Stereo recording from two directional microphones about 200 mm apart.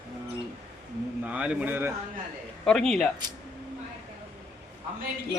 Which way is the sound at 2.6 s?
Centre (ahead or behind).